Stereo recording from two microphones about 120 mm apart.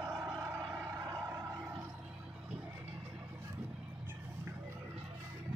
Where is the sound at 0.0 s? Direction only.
20° right (ahead or behind).